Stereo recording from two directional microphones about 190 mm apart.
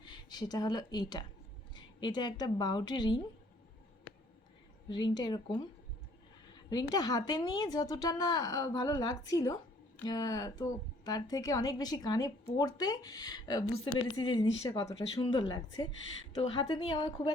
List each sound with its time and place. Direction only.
0.0 s speech: 20° left (ahead or behind)
4.9 s a woman's voice: 25° left (ahead or behind)
6.7 s a woman's voice: 20° left (ahead or behind)